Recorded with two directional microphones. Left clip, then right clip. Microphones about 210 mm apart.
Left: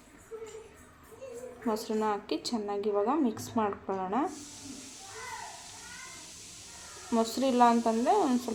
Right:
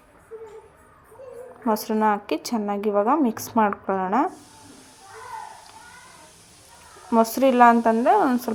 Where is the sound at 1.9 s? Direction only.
30° right (ahead or behind).